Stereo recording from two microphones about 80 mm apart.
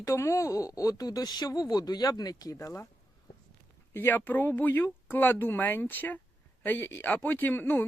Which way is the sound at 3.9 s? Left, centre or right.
Left.